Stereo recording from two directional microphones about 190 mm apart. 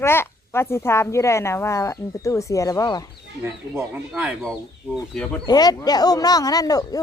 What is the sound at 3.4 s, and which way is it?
Speech, 10° right (ahead or behind).